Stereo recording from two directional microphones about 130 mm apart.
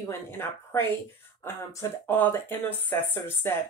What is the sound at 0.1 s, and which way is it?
Speech, 15° left (ahead or behind).